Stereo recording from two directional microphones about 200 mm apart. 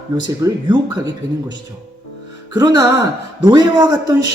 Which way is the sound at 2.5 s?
20° right (ahead or behind).